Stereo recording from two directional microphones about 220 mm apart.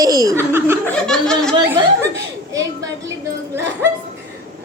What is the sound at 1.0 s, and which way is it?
Speech, 5° left (ahead or behind).